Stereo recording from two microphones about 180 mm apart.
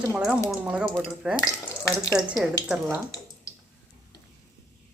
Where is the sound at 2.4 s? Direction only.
5° right (ahead or behind).